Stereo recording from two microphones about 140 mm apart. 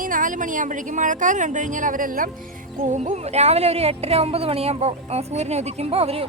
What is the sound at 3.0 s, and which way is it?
Speech, 50° right (ahead or behind).